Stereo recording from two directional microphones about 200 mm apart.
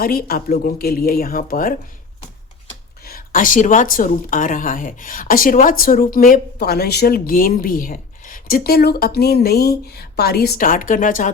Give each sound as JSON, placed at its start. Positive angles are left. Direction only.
{"t": 0.0, "sound": "speech", "side_deg": 45}
{"t": 3.0, "sound": "speech", "side_deg": 45}